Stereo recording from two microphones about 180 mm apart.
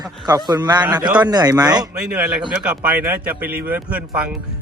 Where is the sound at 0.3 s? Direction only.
20° right (ahead or behind).